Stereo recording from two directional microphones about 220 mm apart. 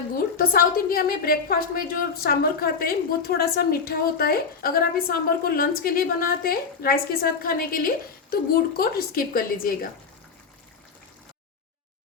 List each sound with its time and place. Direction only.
0.3 s a woman's voice: 40° left (ahead or behind)